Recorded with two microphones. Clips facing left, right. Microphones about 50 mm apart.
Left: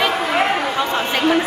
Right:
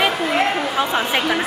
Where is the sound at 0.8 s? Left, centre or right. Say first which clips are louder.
Even; centre.